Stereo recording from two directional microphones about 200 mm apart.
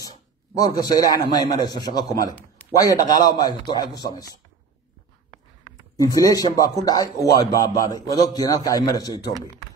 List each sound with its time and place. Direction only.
0.6 s a man's voice: 20° left (ahead or behind)
5.9 s a man's voice: 15° left (ahead or behind)